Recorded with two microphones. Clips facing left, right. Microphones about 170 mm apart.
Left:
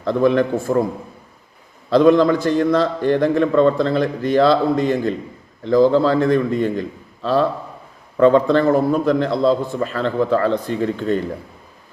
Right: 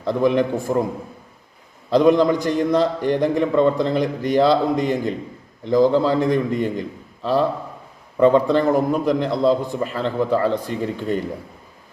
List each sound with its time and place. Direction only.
0.0 s a man's voice: 15° right (ahead or behind)
1.9 s a man's voice: 15° right (ahead or behind)